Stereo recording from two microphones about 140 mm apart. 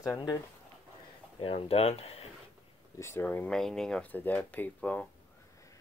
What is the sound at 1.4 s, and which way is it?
Speech, 45° left (ahead or behind).